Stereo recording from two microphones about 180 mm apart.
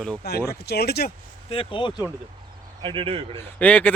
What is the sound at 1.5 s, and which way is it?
Speech, 30° left (ahead or behind).